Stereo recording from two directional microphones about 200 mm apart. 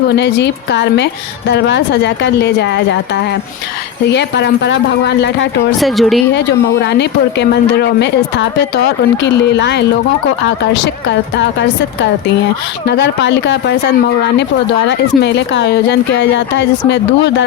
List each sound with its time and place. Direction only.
0.1 s speech: 55° left (ahead or behind)
5.8 s speech: centre (ahead or behind)
6.3 s speech: 60° left (ahead or behind)
12.8 s speech: 60° left (ahead or behind)